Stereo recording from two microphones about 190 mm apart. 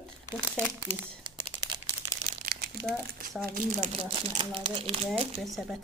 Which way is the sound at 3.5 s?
40° right (ahead or behind).